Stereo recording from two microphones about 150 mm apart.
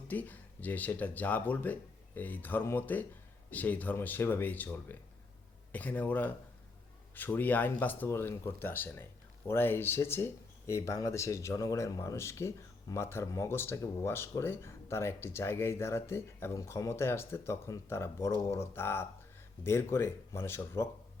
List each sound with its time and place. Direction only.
0.1 s speech: 10° left (ahead or behind)